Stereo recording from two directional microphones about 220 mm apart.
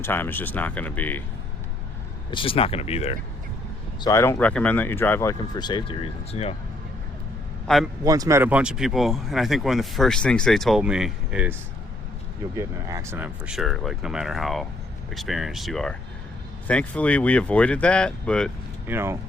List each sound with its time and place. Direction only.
0.0 s speech: 10° left (ahead or behind)
2.3 s speech: 25° left (ahead or behind)
4.0 s speech: 10° left (ahead or behind)
7.7 s speech: 5° left (ahead or behind)
8.0 s speech: 15° right (ahead or behind)
12.5 s speech: 15° right (ahead or behind); by 18.5 s 5° left (ahead or behind)
18.9 s speech: 10° right (ahead or behind)